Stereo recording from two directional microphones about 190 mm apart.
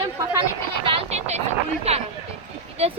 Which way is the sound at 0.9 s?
30° right (ahead or behind).